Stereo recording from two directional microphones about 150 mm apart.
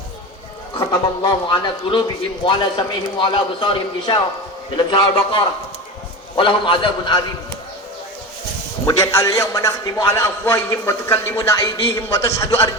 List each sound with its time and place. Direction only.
0.8 s a man's voice: 30° left (ahead or behind)
8.9 s a man's voice: 20° left (ahead or behind)